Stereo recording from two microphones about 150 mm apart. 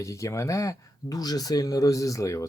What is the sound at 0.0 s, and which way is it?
Speech, 20° left (ahead or behind).